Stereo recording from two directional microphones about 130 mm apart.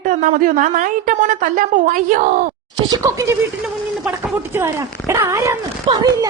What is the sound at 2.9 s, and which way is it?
Speech, 25° right (ahead or behind).